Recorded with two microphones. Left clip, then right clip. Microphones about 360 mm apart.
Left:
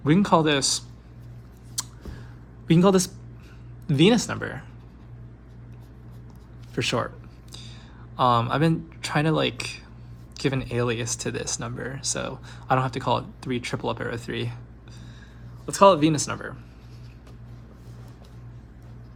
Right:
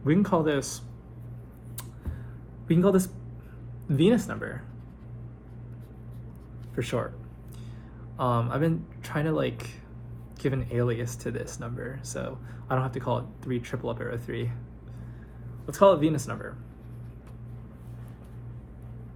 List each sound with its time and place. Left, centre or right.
0.0 s speech: left
2.6 s speech: left
6.7 s speech: left
8.1 s speech: left
15.6 s speech: left